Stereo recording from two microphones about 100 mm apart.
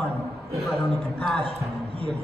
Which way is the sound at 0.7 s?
Centre (ahead or behind).